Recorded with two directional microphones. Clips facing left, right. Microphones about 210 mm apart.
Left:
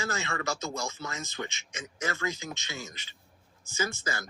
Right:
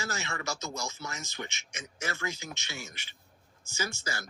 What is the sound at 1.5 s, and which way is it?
Speech, 15° left (ahead or behind).